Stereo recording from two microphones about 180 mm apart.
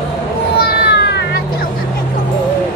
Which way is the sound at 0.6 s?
70° left (ahead or behind).